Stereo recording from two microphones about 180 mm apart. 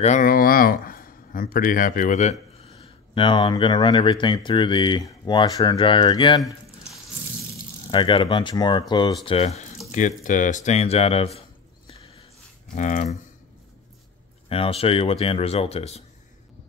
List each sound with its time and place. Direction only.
0.0 s speech: 45° left (ahead or behind)
2.8 s speech: 30° left (ahead or behind)
7.9 s speech: 30° left (ahead or behind)
12.7 s speech: 45° left (ahead or behind)
14.5 s speech: 30° left (ahead or behind)